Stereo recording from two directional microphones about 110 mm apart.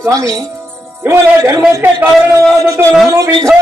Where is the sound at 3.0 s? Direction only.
30° right (ahead or behind).